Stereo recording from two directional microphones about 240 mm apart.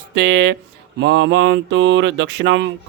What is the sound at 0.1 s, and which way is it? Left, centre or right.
Speech, right.